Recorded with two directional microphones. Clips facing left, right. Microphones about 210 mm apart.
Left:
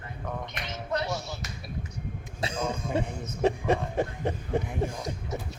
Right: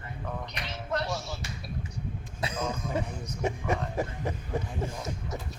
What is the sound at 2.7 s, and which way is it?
Music, 30° left (ahead or behind).